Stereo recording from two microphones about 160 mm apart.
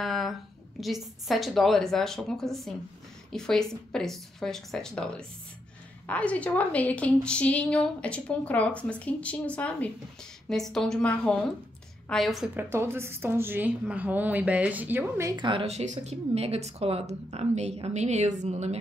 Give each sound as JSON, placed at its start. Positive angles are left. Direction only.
{"t": 0.0, "sound": "a woman's voice", "side_deg": 0}
{"t": 12.5, "sound": "a woman's voice", "side_deg": -15}
{"t": 15.3, "sound": "speech", "side_deg": -30}